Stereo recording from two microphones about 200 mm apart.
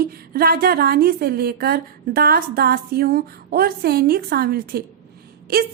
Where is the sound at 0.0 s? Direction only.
50° right (ahead or behind).